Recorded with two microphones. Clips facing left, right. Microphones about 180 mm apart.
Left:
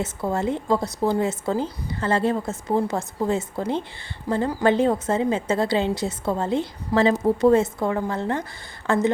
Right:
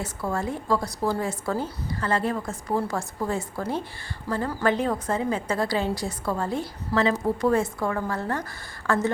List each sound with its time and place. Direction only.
0.0 s a woman's voice: 20° left (ahead or behind)
4.6 s a woman's voice: 25° left (ahead or behind)